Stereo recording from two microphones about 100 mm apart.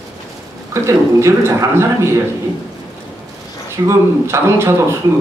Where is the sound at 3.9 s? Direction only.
30° right (ahead or behind).